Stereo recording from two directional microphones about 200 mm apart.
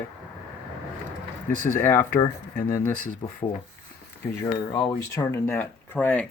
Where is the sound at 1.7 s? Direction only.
10° left (ahead or behind).